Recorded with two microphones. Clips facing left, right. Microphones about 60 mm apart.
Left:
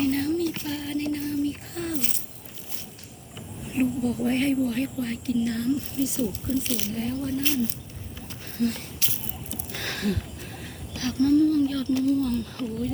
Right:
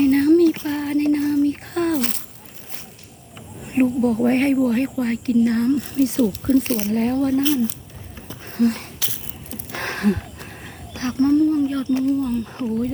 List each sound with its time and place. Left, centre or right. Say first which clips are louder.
0.0 s a sound: right 10 dB; right
1.2 s a sound: right 8 dB; right
3.7 s speech: right 7 dB; right
6.2 s speech: right 10 dB; right
6.7 s speech: right 8 dB; right
6.9 s speech: right 11 dB; right
8.4 s a sound: right 7 dB; right
12.1 s speech: right 3 dB; centre
12.5 s speech: right 6 dB; right